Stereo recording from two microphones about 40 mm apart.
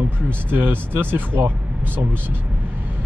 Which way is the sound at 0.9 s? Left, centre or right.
Right.